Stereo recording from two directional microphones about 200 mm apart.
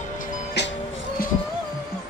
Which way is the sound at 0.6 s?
60° left (ahead or behind).